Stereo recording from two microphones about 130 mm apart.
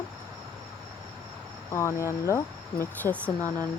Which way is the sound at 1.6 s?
20° left (ahead or behind).